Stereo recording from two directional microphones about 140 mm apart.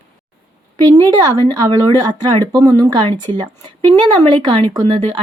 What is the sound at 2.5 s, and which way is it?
Speech, 30° right (ahead or behind).